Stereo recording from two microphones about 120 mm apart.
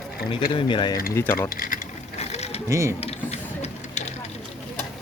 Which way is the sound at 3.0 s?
60° left (ahead or behind).